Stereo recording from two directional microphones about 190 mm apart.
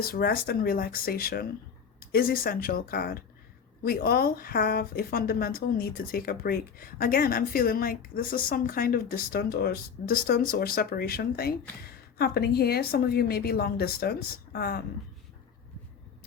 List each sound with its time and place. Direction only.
0.0 s a woman's voice: 55° left (ahead or behind)